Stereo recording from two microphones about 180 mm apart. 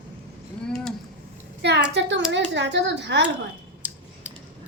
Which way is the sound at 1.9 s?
75° right (ahead or behind).